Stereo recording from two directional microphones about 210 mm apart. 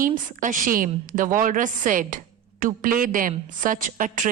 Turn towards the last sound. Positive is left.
turn(degrees=-40)  # may be behind; listen again after turning